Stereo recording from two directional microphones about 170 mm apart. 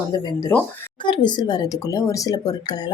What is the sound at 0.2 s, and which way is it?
Speech, 25° left (ahead or behind).